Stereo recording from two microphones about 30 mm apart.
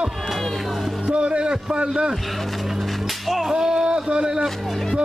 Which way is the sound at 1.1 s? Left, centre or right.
Right.